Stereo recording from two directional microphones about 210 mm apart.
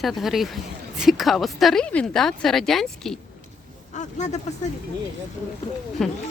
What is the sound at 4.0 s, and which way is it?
Speech, 35° left (ahead or behind).